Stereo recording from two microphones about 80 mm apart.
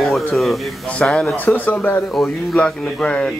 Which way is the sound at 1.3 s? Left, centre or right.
Left.